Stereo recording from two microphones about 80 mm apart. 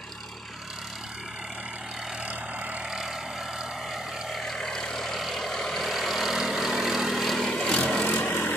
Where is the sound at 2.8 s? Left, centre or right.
Centre.